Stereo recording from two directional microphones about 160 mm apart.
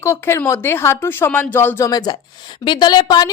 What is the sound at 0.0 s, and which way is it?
Speech, 15° left (ahead or behind).